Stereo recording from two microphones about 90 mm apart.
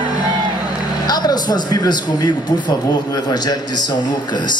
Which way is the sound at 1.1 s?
50° left (ahead or behind).